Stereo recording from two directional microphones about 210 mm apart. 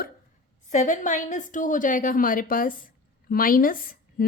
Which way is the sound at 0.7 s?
35° left (ahead or behind).